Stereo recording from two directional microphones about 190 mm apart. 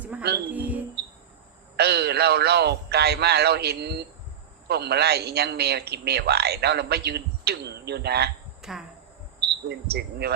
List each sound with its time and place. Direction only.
0.5 s speech: 10° right (ahead or behind)
1.7 s a man's voice: 60° right (ahead or behind)
8.6 s speech: 5° right (ahead or behind)
9.6 s a man's voice: 60° right (ahead or behind)